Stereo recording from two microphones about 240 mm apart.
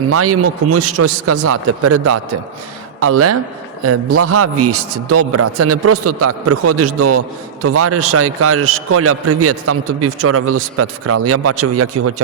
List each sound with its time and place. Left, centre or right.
0.1 s a man's voice: right